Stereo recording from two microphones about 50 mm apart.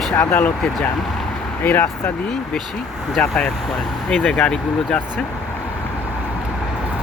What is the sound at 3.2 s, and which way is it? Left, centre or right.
Speech, left.